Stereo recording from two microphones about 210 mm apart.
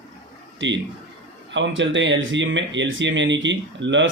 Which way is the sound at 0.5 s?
60° right (ahead or behind).